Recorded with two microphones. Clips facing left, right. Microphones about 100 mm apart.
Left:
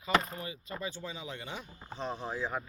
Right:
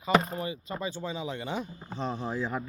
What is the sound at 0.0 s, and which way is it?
Speech, 25° right (ahead or behind).